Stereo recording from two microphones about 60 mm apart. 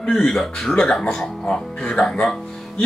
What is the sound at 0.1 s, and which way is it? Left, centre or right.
Speech, centre.